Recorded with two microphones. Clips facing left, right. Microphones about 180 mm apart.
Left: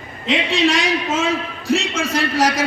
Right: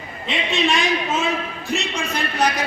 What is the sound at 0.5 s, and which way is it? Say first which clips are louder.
A man's voice: left 1 dB; 90° left.